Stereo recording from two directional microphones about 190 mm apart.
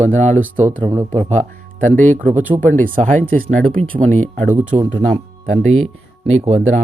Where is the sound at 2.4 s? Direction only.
10° right (ahead or behind).